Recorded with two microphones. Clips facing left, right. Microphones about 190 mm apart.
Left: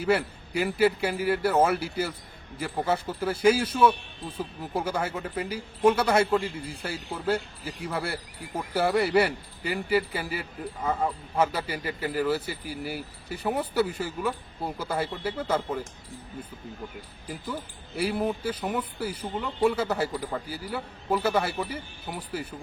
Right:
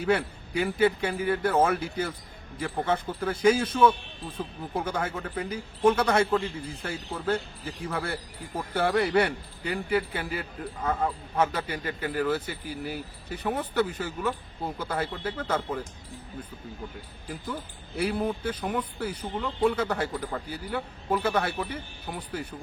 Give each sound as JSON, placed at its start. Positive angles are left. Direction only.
{"t": 0.0, "sound": "speech", "side_deg": 5}
{"t": 17.2, "sound": "speech", "side_deg": 5}